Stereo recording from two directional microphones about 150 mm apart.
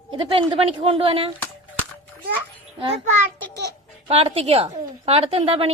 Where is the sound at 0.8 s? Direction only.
35° right (ahead or behind).